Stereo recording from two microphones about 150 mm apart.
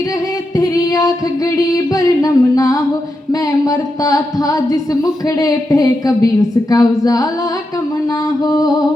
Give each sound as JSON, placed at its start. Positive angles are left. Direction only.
{"t": 0.5, "sound": "female singing", "side_deg": 25}
{"t": 1.5, "sound": "speech", "side_deg": 25}
{"t": 8.4, "sound": "speech", "side_deg": 25}